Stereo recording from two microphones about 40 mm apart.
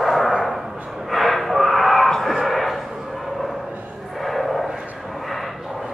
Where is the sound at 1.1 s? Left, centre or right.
Centre.